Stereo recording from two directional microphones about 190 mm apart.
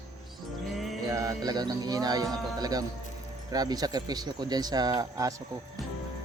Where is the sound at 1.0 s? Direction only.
20° right (ahead or behind).